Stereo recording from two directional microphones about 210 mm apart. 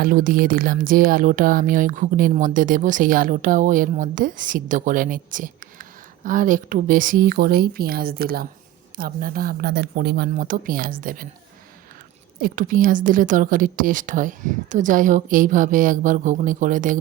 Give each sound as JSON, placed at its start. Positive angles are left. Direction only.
{"t": 0.0, "sound": "speech", "side_deg": -40}
{"t": 12.4, "sound": "speech", "side_deg": -40}